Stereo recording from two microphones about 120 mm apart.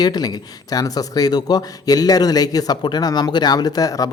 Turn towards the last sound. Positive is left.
turn(degrees=30)  # may be behind; listen again after turning